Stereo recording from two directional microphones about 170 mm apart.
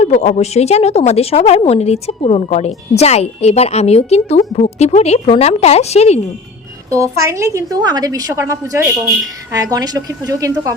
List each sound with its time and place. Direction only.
0.0 s a woman's voice: 40° left (ahead or behind)
6.9 s a woman's voice: 20° right (ahead or behind)